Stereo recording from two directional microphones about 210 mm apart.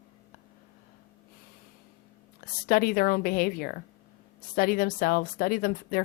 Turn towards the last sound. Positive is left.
turn(degrees=45)  # may be behind; listen again after turning